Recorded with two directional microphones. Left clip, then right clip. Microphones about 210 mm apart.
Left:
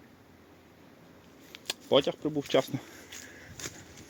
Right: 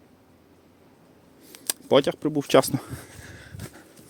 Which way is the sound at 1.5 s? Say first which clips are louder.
Right 5 dB; 50° right (ahead or behind).